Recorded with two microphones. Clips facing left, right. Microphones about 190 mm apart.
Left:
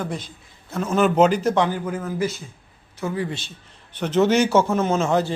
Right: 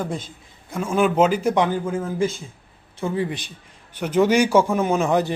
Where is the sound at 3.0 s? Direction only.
25° right (ahead or behind).